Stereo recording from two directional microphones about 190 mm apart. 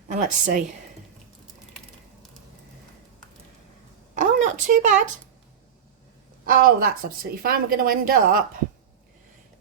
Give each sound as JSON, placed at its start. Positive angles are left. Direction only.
{"t": 0.1, "sound": "a woman's voice", "side_deg": -45}
{"t": 4.1, "sound": "a sound", "side_deg": -40}
{"t": 6.4, "sound": "a woman's voice", "side_deg": -50}